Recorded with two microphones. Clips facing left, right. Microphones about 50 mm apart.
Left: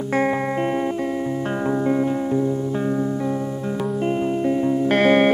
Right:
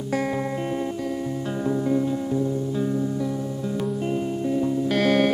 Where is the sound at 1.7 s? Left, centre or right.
Left.